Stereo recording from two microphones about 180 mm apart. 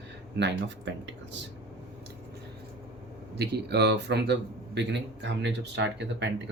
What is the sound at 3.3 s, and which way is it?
A man's voice, 65° right (ahead or behind).